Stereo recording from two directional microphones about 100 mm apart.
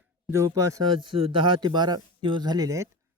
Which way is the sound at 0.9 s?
50° right (ahead or behind).